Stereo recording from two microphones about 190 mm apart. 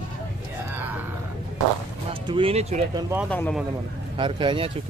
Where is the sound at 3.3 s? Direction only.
10° left (ahead or behind).